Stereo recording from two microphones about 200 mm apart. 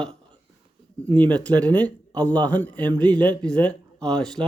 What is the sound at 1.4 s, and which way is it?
A man's voice, 5° left (ahead or behind).